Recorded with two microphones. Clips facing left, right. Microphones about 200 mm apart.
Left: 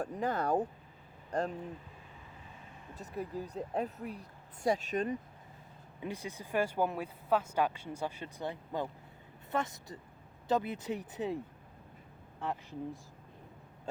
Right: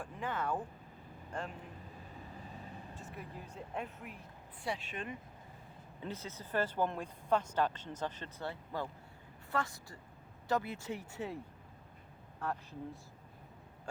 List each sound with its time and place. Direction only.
0.0 s speech: 40° left (ahead or behind)
2.9 s speech: 40° left (ahead or behind)
6.0 s speech: 15° left (ahead or behind)
12.4 s speech: 15° left (ahead or behind)